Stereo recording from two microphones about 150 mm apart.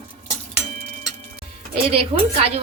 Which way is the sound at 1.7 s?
40° right (ahead or behind).